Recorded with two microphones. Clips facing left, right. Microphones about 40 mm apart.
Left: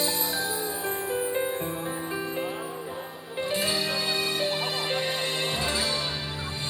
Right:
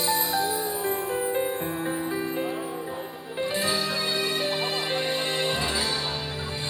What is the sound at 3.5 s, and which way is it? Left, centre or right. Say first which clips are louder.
Music: even; right.